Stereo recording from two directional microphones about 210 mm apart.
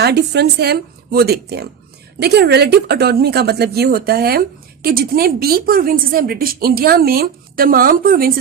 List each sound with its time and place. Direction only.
0.0 s speech: 50° right (ahead or behind)